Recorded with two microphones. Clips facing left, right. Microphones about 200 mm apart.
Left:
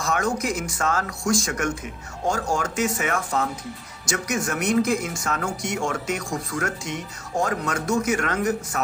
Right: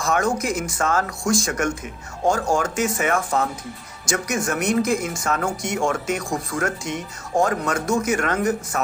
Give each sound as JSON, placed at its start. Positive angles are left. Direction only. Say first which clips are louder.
{"t": 0.0, "sound": "speech", "louder": "right 3 dB", "side_deg": -50}